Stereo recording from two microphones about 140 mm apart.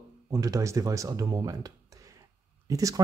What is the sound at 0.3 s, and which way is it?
Speech, 25° right (ahead or behind).